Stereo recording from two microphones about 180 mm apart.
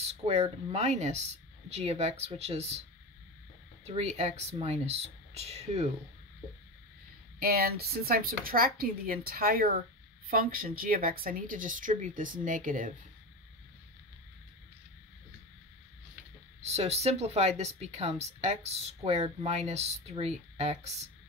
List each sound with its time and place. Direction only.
0.0 s speech: 35° right (ahead or behind)
3.8 s speech: 35° right (ahead or behind)
7.3 s speech: 60° right (ahead or behind)
16.6 s speech: 35° right (ahead or behind)